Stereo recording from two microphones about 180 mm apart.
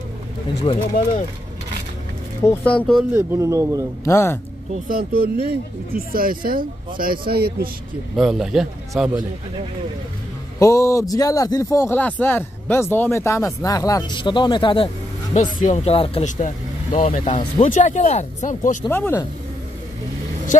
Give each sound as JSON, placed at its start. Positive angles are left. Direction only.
{"t": 0.7, "sound": "speech", "side_deg": 30}
{"t": 2.4, "sound": "a man's voice", "side_deg": 10}
{"t": 3.2, "sound": "a man's voice", "side_deg": -15}
{"t": 4.0, "sound": "a man's voice", "side_deg": 15}
{"t": 4.8, "sound": "speech", "side_deg": -55}
{"t": 8.2, "sound": "a man's voice", "side_deg": 0}
{"t": 10.6, "sound": "a man's voice", "side_deg": 15}
{"t": 15.6, "sound": "speech", "side_deg": 40}
{"t": 17.3, "sound": "speech", "side_deg": 25}
{"t": 17.6, "sound": "speech", "side_deg": 40}
{"t": 18.9, "sound": "a man's voice", "side_deg": 15}